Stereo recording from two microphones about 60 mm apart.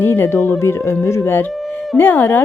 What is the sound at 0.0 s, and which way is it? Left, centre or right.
Speech, left.